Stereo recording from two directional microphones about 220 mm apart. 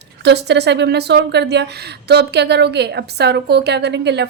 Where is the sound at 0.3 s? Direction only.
50° right (ahead or behind).